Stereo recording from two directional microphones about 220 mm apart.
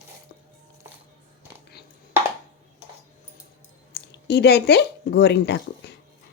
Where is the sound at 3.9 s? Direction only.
50° left (ahead or behind).